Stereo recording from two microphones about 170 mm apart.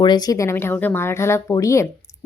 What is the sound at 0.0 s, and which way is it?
A woman's voice, 25° left (ahead or behind).